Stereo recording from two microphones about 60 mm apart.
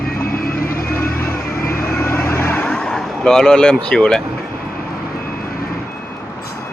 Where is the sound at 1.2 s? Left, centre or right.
Left.